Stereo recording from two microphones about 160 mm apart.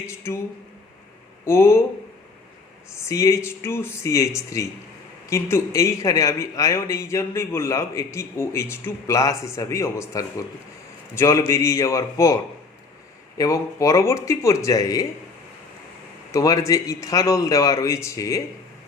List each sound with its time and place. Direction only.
0.1 s speech: 15° left (ahead or behind)
1.5 s speech: 15° left (ahead or behind)
3.1 s a man's voice: 20° left (ahead or behind)
13.4 s a man's voice: 20° left (ahead or behind)
16.3 s a man's voice: 20° left (ahead or behind)